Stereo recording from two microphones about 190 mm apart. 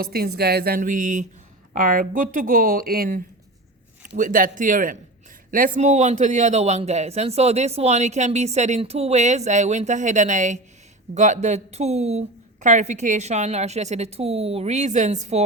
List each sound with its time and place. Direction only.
0.0 s a man's voice: 55° right (ahead or behind); by 15.4 s 35° right (ahead or behind)